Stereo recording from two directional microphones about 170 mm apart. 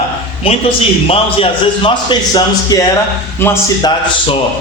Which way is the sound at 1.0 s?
35° left (ahead or behind).